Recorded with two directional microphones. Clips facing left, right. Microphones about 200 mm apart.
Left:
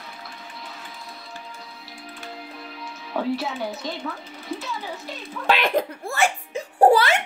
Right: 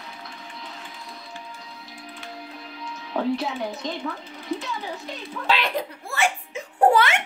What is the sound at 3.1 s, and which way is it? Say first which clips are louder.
Speech: right 1 dB; 5° left (ahead or behind).